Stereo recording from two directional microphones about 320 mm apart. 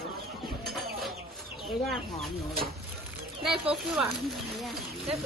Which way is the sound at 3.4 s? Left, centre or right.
Centre.